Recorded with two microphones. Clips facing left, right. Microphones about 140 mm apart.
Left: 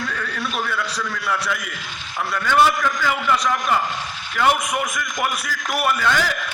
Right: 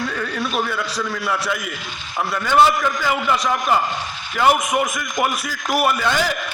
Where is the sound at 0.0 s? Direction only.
20° right (ahead or behind).